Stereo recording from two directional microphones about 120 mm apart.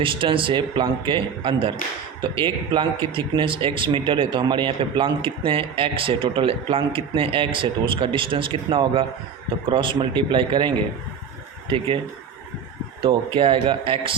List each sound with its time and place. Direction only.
0.0 s a man's voice: 45° right (ahead or behind)
13.0 s a man's voice: 50° right (ahead or behind)